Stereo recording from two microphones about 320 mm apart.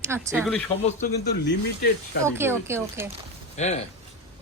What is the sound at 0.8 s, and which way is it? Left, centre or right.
Speech, left.